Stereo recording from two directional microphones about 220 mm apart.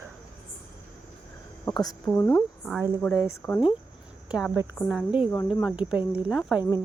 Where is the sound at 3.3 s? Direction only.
10° left (ahead or behind).